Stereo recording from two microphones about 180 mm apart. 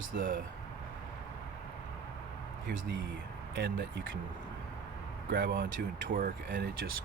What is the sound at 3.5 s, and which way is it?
Speech, 65° right (ahead or behind).